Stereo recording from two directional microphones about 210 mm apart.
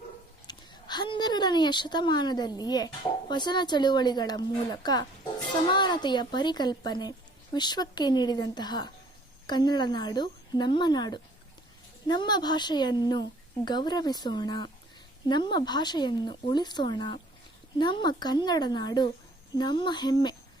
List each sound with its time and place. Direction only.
0.4 s speech: 20° left (ahead or behind)